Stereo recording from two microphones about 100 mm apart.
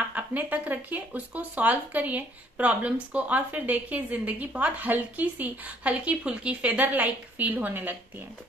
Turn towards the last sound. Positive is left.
turn(degrees=-20)  # may be behind; listen again after turning